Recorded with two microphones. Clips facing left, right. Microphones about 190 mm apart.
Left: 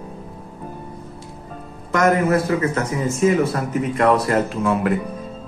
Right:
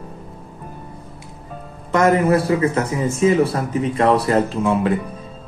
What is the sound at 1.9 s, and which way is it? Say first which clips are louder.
A man's voice: right 2 dB; 30° right (ahead or behind).